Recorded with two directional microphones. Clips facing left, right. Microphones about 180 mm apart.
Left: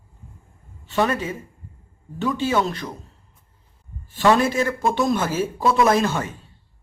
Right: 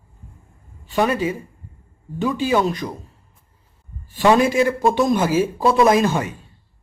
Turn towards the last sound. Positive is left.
turn(degrees=-15)  # may be behind; listen again after turning